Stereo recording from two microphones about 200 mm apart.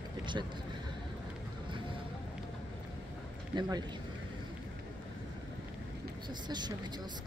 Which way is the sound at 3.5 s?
20° right (ahead or behind).